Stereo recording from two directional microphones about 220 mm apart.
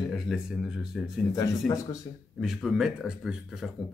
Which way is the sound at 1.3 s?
15° left (ahead or behind).